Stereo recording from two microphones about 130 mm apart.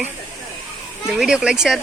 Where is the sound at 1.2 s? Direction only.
5° right (ahead or behind).